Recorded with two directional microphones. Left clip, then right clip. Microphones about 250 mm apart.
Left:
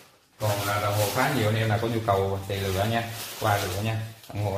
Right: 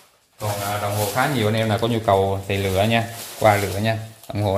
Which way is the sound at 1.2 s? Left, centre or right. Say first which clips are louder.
Right 8 dB; right.